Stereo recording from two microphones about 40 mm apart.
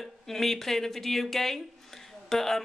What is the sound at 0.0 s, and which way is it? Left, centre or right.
Speech, centre.